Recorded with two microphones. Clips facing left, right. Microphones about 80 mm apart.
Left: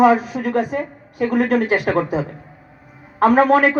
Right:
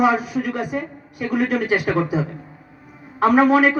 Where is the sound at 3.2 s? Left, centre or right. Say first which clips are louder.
Left 1 dB; left.